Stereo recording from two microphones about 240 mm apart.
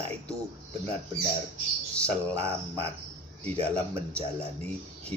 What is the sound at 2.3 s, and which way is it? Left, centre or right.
Speech, right.